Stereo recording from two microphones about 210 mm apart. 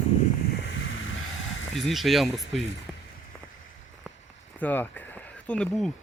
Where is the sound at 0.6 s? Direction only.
65° left (ahead or behind).